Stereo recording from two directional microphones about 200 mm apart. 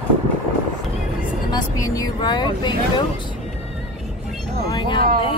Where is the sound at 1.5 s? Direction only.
15° left (ahead or behind).